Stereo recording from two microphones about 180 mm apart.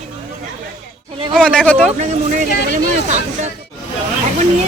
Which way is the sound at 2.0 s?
45° right (ahead or behind).